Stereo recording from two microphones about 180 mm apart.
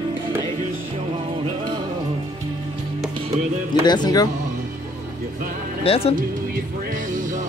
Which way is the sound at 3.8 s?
25° left (ahead or behind).